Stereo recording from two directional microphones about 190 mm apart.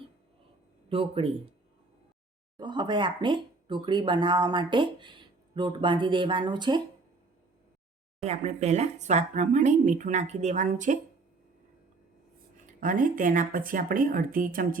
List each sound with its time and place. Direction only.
0.9 s speech: 30° right (ahead or behind)
2.6 s speech: 25° right (ahead or behind)
8.2 s speech: 35° right (ahead or behind)
12.8 s a woman's voice: 45° right (ahead or behind)